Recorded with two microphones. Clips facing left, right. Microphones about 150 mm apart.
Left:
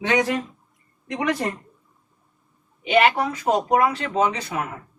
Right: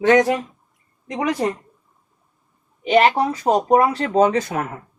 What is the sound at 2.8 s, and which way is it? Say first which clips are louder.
Speech: right 3 dB; 35° right (ahead or behind).